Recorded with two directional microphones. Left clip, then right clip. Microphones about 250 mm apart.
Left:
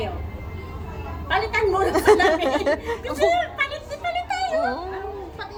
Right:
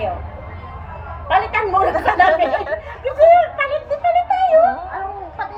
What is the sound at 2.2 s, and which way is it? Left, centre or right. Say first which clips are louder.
Speech: right 4 dB; left.